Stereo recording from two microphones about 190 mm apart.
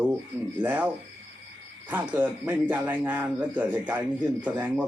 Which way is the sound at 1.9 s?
10° right (ahead or behind).